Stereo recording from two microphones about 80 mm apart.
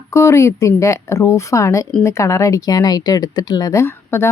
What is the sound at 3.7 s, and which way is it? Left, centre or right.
Speech, left.